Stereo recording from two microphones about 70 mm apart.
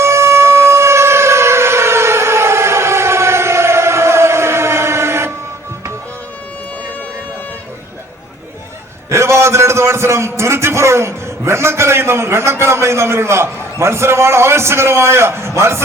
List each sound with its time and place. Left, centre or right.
0.0 s siren: right
9.0 s a man's voice: right